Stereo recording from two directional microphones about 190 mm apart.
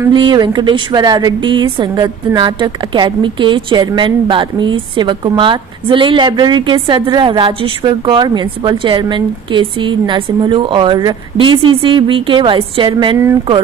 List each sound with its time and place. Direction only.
0.1 s speech: 25° right (ahead or behind)